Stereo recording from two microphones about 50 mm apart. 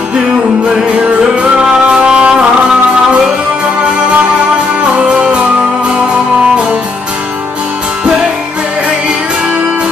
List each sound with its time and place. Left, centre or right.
1.6 s music: centre
5.0 s music: right